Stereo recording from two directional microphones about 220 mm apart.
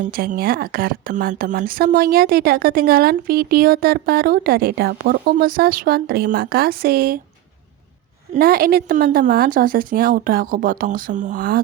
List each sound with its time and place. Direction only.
0.0 s speech: 40° right (ahead or behind)
8.3 s a woman's voice: 45° right (ahead or behind)